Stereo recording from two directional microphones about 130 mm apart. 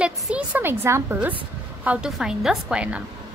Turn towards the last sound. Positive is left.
turn(degrees=-10)  # may be behind; listen again after turning